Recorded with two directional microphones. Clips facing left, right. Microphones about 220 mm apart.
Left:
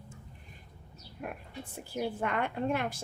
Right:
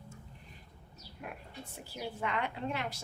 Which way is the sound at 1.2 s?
50° left (ahead or behind).